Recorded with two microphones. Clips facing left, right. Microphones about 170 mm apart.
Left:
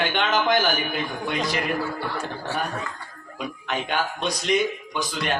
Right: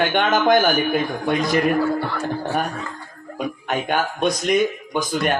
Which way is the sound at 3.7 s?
45° right (ahead or behind).